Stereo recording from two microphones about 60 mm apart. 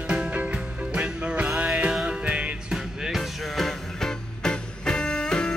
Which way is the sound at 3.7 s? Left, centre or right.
Centre.